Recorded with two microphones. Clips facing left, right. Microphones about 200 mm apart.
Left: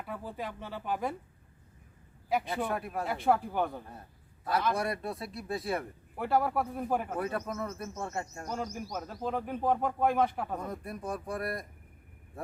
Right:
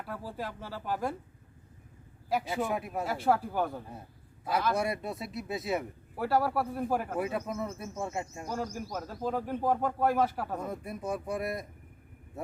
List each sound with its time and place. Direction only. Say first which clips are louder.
0.0 s speech: even; centre (ahead or behind)
2.3 s a man's voice: right 1 dB; 5° right (ahead or behind)
5.1 s speech: right 1 dB; 20° right (ahead or behind)
5.5 s a man's voice: right 1 dB; 5° right (ahead or behind)